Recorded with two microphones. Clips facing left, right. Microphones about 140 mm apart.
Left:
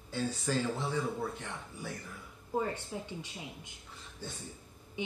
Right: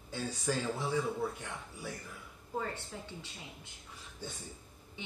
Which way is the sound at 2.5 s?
15° left (ahead or behind).